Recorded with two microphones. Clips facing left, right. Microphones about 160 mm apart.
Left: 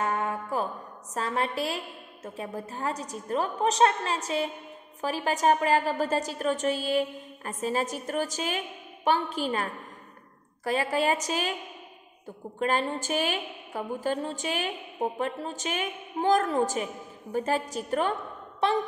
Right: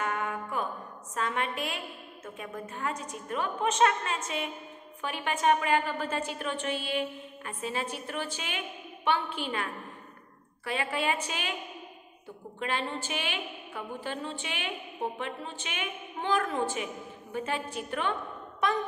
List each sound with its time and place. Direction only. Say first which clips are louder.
0.0 s music: left 3 dB; 35° left (ahead or behind)
1.1 s a woman's voice: left 3 dB; 35° left (ahead or behind)
12.5 s a woman's voice: left 6 dB; 40° left (ahead or behind)